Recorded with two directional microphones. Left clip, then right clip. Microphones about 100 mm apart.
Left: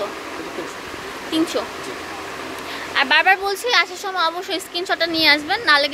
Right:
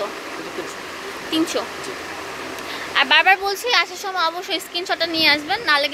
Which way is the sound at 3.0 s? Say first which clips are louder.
Right 1 dB; 15° left (ahead or behind).